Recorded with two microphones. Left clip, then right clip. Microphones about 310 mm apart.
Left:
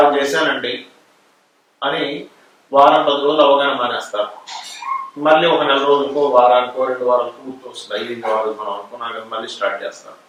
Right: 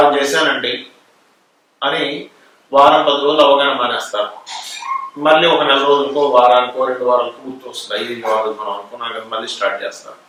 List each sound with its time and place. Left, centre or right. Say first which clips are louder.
0.0 s a man's voice: right 1 dB; centre
2.6 s a man's voice: right 1 dB; left
2.9 s speech: right 2 dB; centre
6.0 s speech: right 1 dB; left
6.4 s speech: right 2 dB; centre; by 7.3 s left
7.7 s speech: right 3 dB; centre
8.4 s speech: right 1 dB; left
9.0 s speech: right 2 dB; centre